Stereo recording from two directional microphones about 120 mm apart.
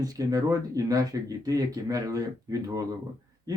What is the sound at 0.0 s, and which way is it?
Speech, 30° right (ahead or behind).